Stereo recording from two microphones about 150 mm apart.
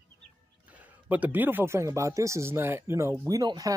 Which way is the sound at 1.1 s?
10° right (ahead or behind).